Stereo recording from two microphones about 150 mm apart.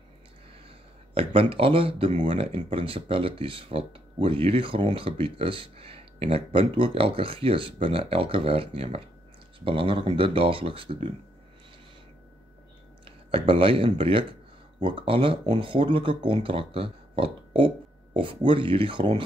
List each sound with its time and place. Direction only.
1.1 s speech: 40° right (ahead or behind)
13.0 s speech: 35° right (ahead or behind)